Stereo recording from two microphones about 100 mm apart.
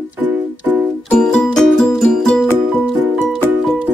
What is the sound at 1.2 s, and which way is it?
Music, 5° left (ahead or behind).